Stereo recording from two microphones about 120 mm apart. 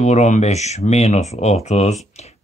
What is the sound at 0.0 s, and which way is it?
Speech, 70° left (ahead or behind).